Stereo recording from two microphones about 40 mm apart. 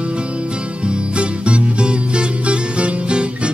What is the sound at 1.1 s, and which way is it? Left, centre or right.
Music, right.